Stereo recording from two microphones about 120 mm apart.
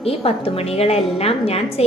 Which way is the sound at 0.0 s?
55° left (ahead or behind).